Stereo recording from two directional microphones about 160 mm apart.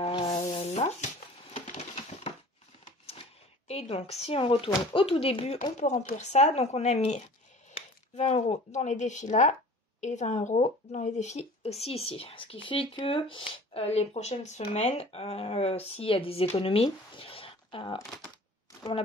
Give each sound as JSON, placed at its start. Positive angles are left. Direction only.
{"t": 0.1, "sound": "music", "side_deg": 30}
{"t": 0.4, "sound": "rub", "side_deg": 40}
{"t": 1.5, "sound": "a sound", "side_deg": 40}
{"t": 3.6, "sound": "a woman's voice", "side_deg": 40}
{"t": 5.8, "sound": "speech", "side_deg": 45}